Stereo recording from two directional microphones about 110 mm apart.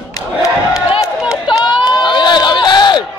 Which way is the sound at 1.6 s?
45° left (ahead or behind).